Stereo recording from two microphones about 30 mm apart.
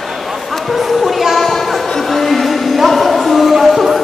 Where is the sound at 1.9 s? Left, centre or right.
Centre.